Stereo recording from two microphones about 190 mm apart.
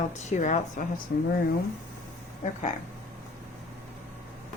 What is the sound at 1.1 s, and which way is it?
Speech, 55° left (ahead or behind).